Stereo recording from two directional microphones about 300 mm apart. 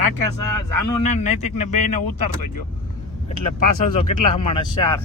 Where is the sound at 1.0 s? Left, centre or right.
Left.